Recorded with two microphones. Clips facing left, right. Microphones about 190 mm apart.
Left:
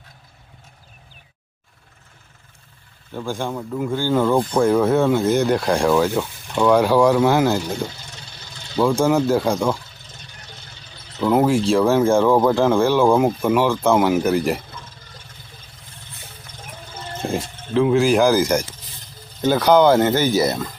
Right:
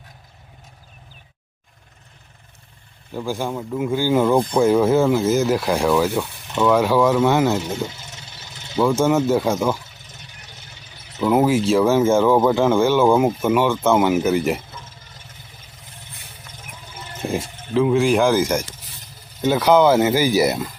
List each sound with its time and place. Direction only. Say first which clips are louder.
3.2 s speech: right 1 dB; 5° right (ahead or behind)
4.6 s speech: right 1 dB; 5° right (ahead or behind)
7.6 s vehicle: even; 20° right (ahead or behind)
9.0 s speech: even; centre (ahead or behind)
9.8 s vehicle: even; 20° right (ahead or behind)
11.3 s speech: even; 5° right (ahead or behind)
16.9 s a sound: left 1 dB; 15° right (ahead or behind)
17.7 s speech: left 1 dB; centre (ahead or behind); by 20.6 s 15° right (ahead or behind)